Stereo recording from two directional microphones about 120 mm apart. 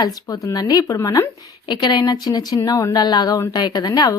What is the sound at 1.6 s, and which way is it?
A woman's voice, 40° left (ahead or behind).